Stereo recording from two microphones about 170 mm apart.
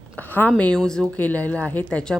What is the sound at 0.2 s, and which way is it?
A woman's voice, 10° left (ahead or behind).